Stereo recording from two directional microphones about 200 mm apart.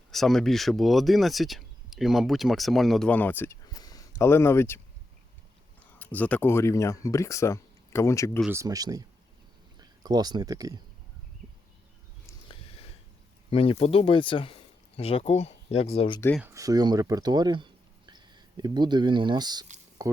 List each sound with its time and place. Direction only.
0.1 s speech: centre (ahead or behind)
6.0 s speech: 10° left (ahead or behind)
8.4 s speech: 10° right (ahead or behind)
13.5 s speech: 30° left (ahead or behind)
16.4 s speech: 15° right (ahead or behind)